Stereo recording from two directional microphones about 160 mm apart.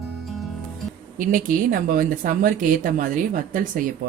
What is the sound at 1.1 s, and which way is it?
Speech, 55° right (ahead or behind).